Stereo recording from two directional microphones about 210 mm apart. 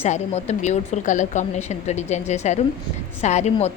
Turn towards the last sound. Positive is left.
turn(degrees=30)  # may be behind; listen again after turning